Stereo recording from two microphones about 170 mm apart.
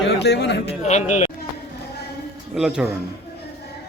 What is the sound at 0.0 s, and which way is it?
Speech, 80° left.